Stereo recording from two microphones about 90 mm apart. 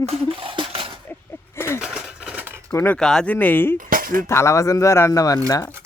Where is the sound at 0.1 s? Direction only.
90° right; by 0.9 s 75° right (ahead or behind).